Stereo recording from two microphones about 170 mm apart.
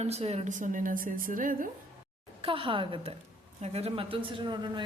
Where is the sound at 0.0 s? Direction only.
40° right (ahead or behind).